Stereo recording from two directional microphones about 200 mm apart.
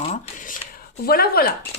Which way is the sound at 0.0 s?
35° left (ahead or behind).